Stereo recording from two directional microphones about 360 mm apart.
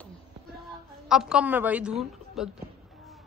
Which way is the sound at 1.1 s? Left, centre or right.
Centre.